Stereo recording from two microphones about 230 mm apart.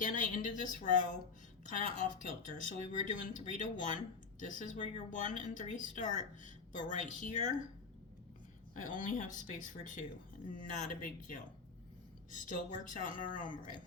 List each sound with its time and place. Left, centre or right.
0.0 s speech: left
8.7 s speech: left